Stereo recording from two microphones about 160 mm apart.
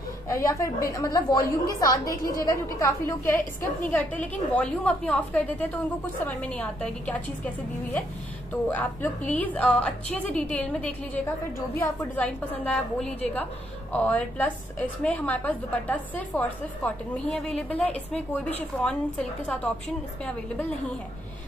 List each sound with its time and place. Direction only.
0.3 s a woman's voice: 20° left (ahead or behind)
12.2 s a woman's voice: 5° left (ahead or behind)